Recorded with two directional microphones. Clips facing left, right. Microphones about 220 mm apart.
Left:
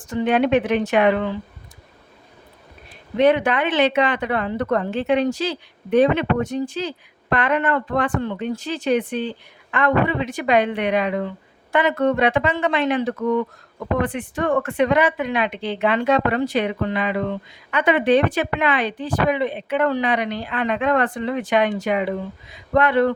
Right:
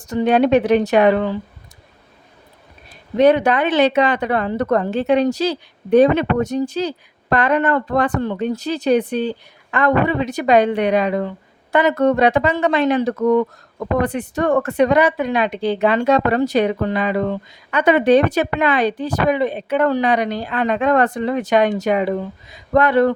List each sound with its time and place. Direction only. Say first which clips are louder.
0.0 s speech: right 4 dB; 40° right (ahead or behind)
3.2 s speech: right 3 dB; 40° right (ahead or behind)